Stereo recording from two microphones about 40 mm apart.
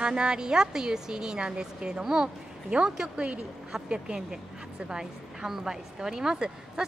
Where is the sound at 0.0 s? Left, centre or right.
Right.